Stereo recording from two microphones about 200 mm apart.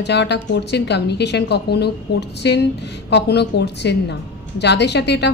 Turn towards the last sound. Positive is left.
turn(degrees=60)  # may be behind; listen again after turning